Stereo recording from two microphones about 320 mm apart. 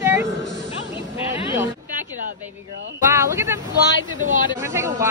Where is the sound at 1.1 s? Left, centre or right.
Centre.